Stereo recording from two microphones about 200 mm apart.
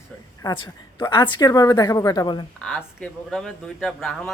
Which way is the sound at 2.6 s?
Centre (ahead or behind).